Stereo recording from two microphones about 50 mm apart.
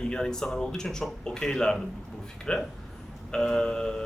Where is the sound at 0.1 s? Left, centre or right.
Centre.